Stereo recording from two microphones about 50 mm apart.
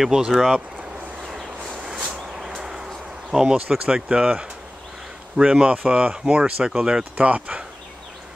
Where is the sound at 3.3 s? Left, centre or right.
Centre.